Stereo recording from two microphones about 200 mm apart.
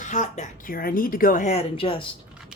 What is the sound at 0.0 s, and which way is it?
A woman's voice, 35° left (ahead or behind).